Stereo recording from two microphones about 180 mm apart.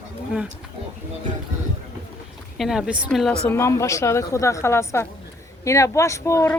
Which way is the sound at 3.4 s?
15° left (ahead or behind).